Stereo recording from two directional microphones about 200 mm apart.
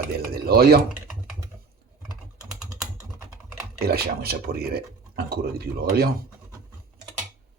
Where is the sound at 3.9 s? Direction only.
50° right (ahead or behind).